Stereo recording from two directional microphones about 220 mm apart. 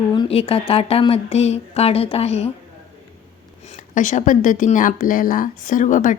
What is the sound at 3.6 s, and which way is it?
Speech, 30° left (ahead or behind).